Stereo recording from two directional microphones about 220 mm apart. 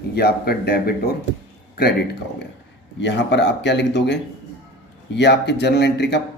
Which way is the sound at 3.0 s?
55° left (ahead or behind).